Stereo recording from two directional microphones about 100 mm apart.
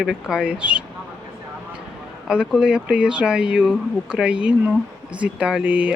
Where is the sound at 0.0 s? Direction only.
5° right (ahead or behind).